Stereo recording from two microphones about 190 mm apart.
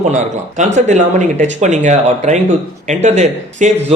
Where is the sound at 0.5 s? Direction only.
40° right (ahead or behind).